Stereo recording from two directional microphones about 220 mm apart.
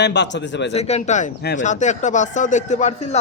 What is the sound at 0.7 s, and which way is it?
Speech, 30° left (ahead or behind).